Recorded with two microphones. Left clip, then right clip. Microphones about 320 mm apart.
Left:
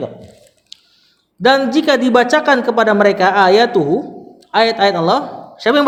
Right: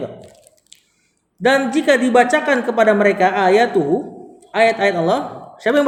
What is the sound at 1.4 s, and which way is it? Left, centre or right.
A man's voice, left.